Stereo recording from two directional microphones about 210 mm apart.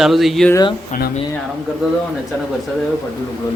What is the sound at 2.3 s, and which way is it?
Speech, 10° left (ahead or behind).